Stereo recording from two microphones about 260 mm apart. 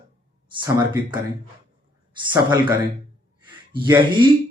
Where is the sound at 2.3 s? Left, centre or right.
Centre.